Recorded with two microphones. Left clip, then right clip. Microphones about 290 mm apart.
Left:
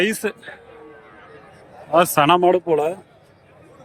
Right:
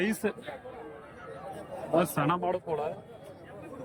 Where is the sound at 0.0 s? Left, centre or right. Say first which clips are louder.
Left 10 dB; centre.